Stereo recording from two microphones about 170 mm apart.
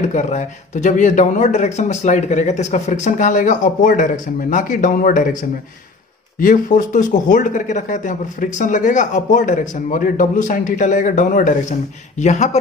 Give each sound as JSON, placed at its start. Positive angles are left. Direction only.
{"t": 0.1, "sound": "speech", "side_deg": 45}
{"t": 6.4, "sound": "speech", "side_deg": 50}